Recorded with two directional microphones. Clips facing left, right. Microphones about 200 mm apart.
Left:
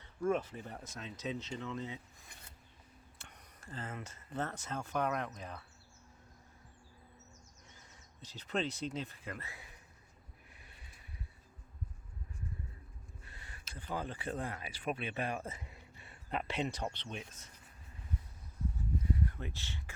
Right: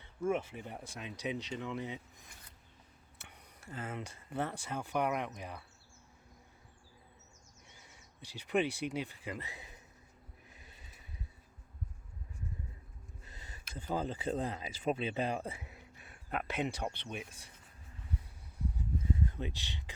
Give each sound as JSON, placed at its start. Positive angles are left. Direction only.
{"t": 0.2, "sound": "speech", "side_deg": -10}
{"t": 3.2, "sound": "speech", "side_deg": -10}
{"t": 8.2, "sound": "speech", "side_deg": -10}
{"t": 13.2, "sound": "gasp", "side_deg": -20}
{"t": 13.7, "sound": "speech", "side_deg": -20}
{"t": 19.2, "sound": "speech", "side_deg": -20}